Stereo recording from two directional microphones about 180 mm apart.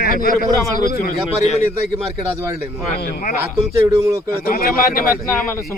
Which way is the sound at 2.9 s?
65° left (ahead or behind).